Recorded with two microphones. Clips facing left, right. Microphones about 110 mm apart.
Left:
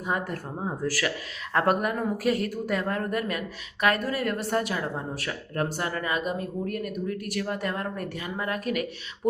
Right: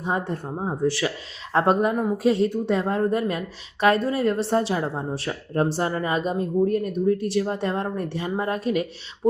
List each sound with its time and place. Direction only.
0.0 s a woman's voice: 25° right (ahead or behind)